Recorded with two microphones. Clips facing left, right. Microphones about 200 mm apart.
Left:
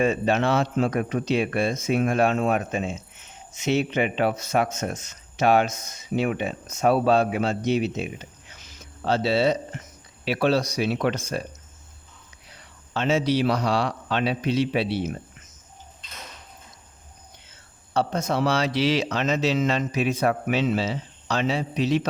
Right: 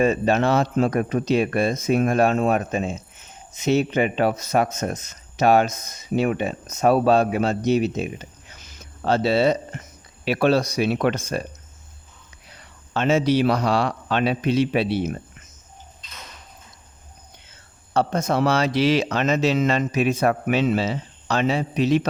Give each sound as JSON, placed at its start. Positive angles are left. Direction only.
{"t": 0.0, "sound": "speech", "side_deg": -40}
{"t": 12.9, "sound": "speech", "side_deg": -50}
{"t": 17.9, "sound": "speech", "side_deg": -50}